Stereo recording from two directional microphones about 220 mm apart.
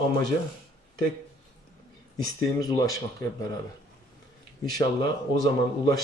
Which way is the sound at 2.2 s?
15° left (ahead or behind).